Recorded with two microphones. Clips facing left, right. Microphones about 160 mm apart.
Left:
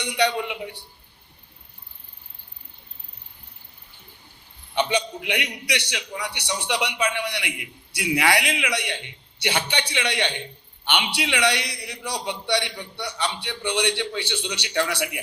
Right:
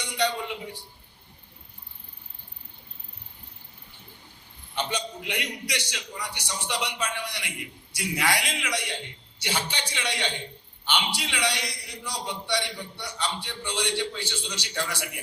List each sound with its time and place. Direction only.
0.0 s a man's voice: 65° left (ahead or behind)
4.7 s a man's voice: 65° left (ahead or behind)